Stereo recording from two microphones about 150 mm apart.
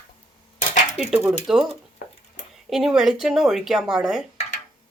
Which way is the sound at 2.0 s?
80° left.